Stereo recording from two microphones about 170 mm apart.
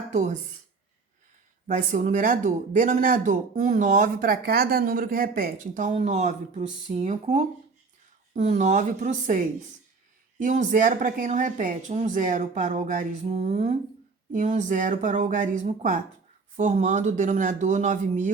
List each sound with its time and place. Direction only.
0.1 s speech: 45° right (ahead or behind)
1.6 s speech: 50° right (ahead or behind)